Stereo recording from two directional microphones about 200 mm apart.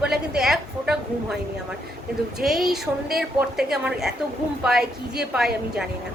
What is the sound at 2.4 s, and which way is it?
A woman's voice, centre (ahead or behind).